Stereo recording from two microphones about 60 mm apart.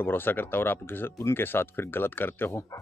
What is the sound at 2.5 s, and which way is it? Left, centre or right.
Speech, left.